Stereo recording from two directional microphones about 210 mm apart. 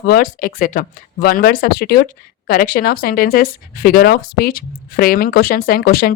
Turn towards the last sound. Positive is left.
turn(degrees=45)  # may be behind; listen again after turning